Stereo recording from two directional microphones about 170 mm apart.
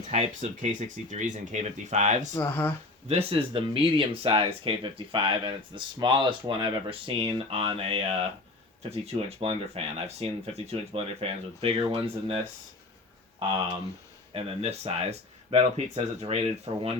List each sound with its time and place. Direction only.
0.1 s speech: 40° right (ahead or behind)
2.3 s speech: 15° left (ahead or behind)
3.1 s speech: 35° right (ahead or behind)
13.4 s speech: 30° right (ahead or behind)
16.7 s speech: 35° right (ahead or behind)